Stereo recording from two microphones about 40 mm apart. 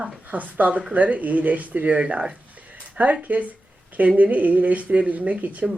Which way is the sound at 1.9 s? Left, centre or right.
Right.